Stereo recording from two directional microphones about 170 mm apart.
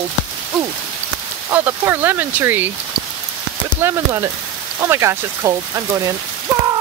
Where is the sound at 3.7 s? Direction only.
15° right (ahead or behind).